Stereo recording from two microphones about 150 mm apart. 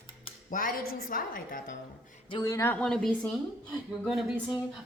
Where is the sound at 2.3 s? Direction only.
25° left (ahead or behind).